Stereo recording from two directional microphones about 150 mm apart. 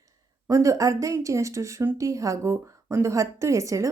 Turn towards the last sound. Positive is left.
turn(degrees=-20)  # may be behind; listen again after turning